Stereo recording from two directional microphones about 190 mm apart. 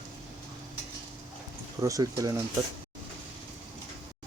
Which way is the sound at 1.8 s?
15° right (ahead or behind).